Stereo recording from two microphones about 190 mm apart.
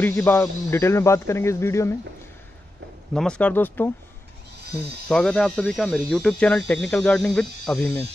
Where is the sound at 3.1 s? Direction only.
5° left (ahead or behind).